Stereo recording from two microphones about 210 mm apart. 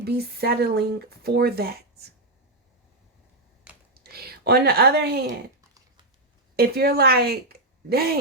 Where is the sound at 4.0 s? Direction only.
50° right (ahead or behind).